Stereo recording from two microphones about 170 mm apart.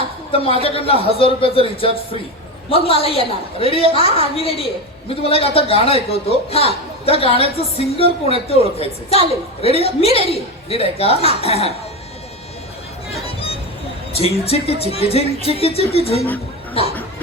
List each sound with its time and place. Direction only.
0.3 s a man's voice: 35° left (ahead or behind)
14.1 s a man's voice: 35° left (ahead or behind)